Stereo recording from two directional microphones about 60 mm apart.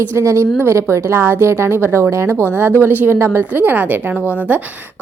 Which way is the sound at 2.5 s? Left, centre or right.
Right.